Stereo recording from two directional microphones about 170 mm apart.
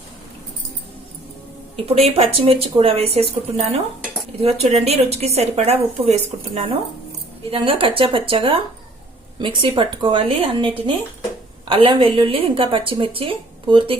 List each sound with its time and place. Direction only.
1.9 s a woman's voice: 35° right (ahead or behind)
11.7 s a woman's voice: 30° right (ahead or behind)